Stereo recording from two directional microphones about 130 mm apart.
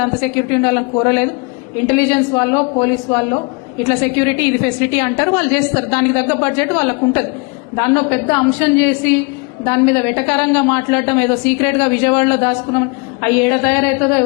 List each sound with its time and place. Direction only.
0.5 s a woman's voice: 15° left (ahead or behind)